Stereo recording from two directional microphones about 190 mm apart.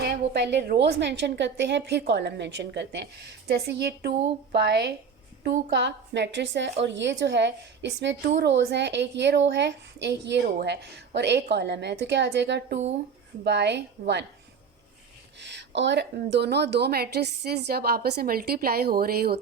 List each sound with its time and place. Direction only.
0.0 s a woman's voice: 60° right (ahead or behind)
15.4 s a woman's voice: 65° right (ahead or behind)